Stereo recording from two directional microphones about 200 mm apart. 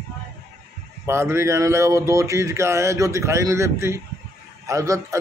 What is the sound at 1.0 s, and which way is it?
Speech, 15° right (ahead or behind).